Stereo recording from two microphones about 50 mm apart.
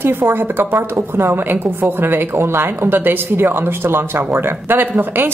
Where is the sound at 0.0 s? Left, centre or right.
Right.